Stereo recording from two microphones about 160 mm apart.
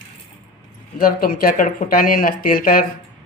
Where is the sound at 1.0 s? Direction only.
65° left (ahead or behind).